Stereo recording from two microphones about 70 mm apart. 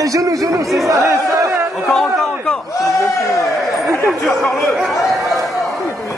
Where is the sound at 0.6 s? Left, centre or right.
Centre.